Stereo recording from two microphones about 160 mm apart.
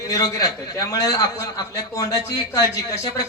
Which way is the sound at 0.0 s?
20° left (ahead or behind).